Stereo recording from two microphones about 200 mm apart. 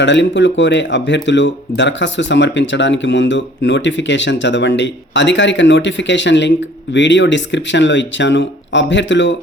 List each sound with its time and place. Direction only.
0.0 s speech: 65° left (ahead or behind)